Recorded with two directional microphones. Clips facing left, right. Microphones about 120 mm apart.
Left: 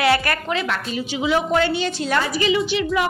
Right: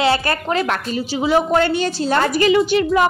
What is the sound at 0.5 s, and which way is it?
A woman's voice, 45° right (ahead or behind).